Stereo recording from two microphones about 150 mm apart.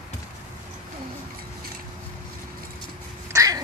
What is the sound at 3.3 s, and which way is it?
Cat, 20° right (ahead or behind).